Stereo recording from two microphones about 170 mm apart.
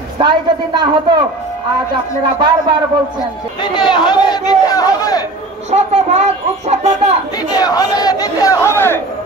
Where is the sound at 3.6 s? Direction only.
25° left (ahead or behind).